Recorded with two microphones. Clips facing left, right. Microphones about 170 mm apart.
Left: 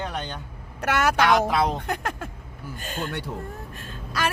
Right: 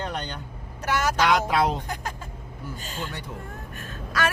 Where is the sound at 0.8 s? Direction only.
65° left (ahead or behind).